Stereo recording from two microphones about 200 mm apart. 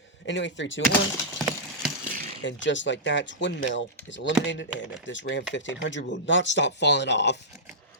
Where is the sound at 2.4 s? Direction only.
65° left (ahead or behind).